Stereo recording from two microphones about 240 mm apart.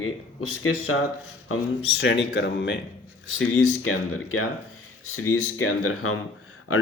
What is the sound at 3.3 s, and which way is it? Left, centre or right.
Speech, left.